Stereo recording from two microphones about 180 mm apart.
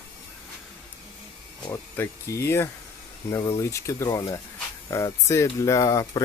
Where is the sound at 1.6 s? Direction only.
15° left (ahead or behind).